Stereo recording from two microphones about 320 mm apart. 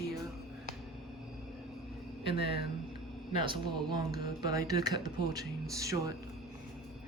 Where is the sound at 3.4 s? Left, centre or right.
Centre.